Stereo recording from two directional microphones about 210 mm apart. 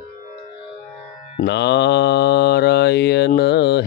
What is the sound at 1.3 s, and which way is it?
Mantra, 55° left (ahead or behind).